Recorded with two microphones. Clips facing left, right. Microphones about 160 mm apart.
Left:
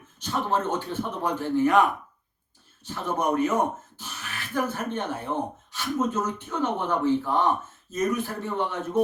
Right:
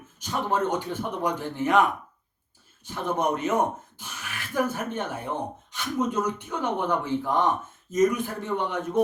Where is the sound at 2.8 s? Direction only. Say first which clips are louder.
Right 1 dB; 15° right (ahead or behind).